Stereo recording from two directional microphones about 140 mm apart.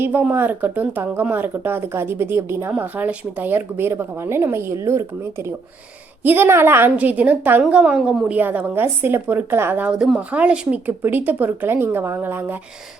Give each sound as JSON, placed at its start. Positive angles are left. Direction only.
{"t": 0.0, "sound": "speech", "side_deg": -15}